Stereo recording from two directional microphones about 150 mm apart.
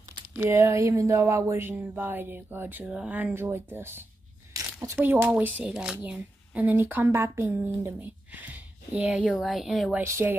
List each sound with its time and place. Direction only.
0.3 s speech: 15° right (ahead or behind); by 9.9 s centre (ahead or behind)
9.9 s speech: 15° right (ahead or behind)